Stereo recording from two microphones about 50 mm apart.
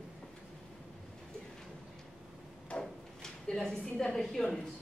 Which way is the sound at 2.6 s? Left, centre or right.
Centre.